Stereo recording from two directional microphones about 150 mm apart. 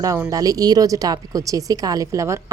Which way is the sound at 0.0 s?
20° right (ahead or behind).